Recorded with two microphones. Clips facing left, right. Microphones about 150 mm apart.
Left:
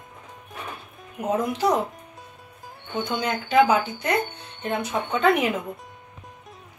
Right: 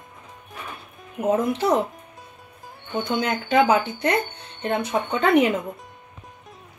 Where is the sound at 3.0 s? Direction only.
55° right (ahead or behind).